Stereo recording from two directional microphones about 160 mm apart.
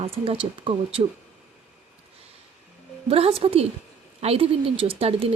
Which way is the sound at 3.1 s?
35° right (ahead or behind).